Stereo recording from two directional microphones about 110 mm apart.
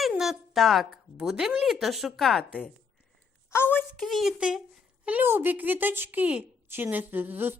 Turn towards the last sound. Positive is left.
turn(degrees=-20)  # may be behind; listen again after turning